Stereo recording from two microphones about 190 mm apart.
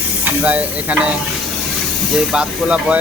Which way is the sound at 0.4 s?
10° right (ahead or behind).